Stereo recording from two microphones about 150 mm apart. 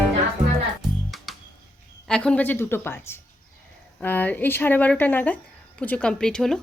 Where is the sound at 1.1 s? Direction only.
Centre (ahead or behind).